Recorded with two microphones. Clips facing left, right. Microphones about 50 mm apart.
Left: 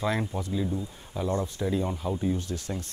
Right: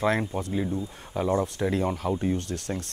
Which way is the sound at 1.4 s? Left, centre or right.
Right.